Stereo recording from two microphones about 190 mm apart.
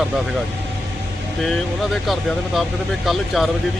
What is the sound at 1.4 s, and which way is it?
Speech, centre (ahead or behind).